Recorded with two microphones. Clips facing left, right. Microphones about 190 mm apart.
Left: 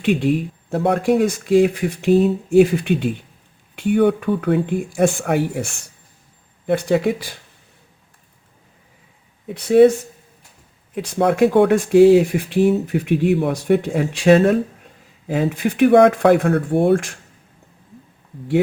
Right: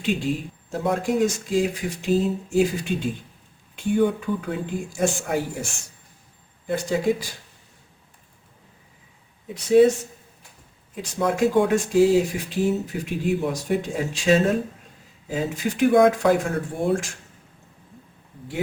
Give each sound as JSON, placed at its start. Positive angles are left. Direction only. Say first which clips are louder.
{"t": 0.0, "sound": "speech", "louder": "left 7 dB", "side_deg": 60}
{"t": 6.7, "sound": "speech", "louder": "left 5 dB", "side_deg": 60}
{"t": 9.6, "sound": "speech", "louder": "left 4 dB", "side_deg": 60}
{"t": 10.9, "sound": "speech", "louder": "left 6 dB", "side_deg": 65}